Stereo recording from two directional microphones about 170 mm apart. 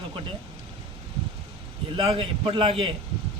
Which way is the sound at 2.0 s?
30° right (ahead or behind).